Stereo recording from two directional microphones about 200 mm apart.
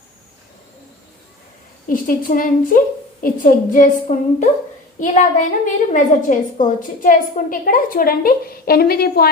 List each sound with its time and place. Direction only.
1.9 s a woman's voice: 45° left (ahead or behind)